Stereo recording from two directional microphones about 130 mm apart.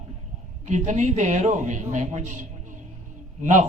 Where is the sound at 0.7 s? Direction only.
70° right (ahead or behind).